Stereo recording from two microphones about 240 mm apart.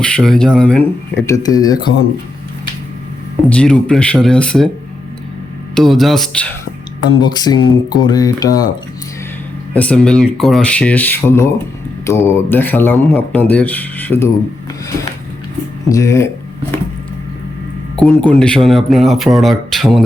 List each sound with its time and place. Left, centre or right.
0.0 s speech: centre
1.4 s speech: centre
3.5 s speech: centre
5.7 s speech: centre
7.1 s speech: centre
9.7 s speech: centre
15.9 s speech: centre
17.9 s speech: centre